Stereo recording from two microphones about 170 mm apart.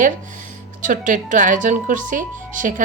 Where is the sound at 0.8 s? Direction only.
50° right (ahead or behind).